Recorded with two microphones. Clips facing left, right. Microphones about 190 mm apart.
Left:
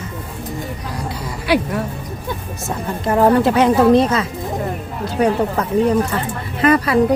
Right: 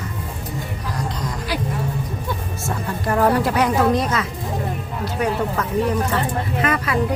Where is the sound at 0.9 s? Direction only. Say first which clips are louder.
Right 2 dB; 10° left (ahead or behind).